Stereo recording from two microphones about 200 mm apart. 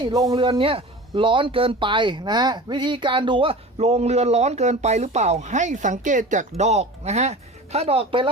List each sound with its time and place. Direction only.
0.0 s speech: 20° right (ahead or behind)